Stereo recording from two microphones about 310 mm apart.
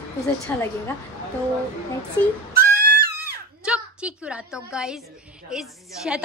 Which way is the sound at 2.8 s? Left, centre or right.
Right.